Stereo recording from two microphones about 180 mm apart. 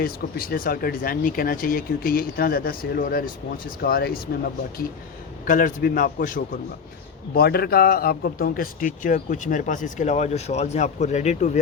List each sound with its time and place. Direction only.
0.0 s speech: 55° left (ahead or behind)
5.5 s a man's voice: 50° left (ahead or behind)
7.3 s a man's voice: 60° left (ahead or behind); by 11.5 s 40° left (ahead or behind)